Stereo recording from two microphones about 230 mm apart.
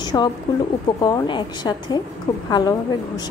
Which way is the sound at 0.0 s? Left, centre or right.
Centre.